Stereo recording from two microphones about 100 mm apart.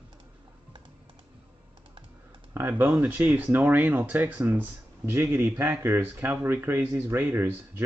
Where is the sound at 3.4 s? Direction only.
30° right (ahead or behind).